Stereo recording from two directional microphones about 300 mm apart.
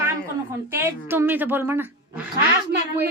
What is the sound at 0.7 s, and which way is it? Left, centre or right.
A woman's voice, centre.